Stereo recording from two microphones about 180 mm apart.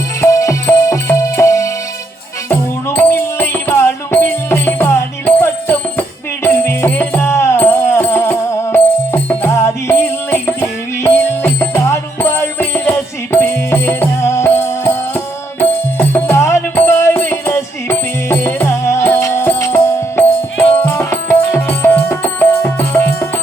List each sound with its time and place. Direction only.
0.2 s music: 15° left (ahead or behind)
11.0 s music: 10° left (ahead or behind)
16.0 s music: 10° left (ahead or behind)